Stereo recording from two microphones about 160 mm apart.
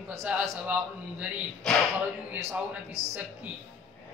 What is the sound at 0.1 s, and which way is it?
Speech, 15° right (ahead or behind).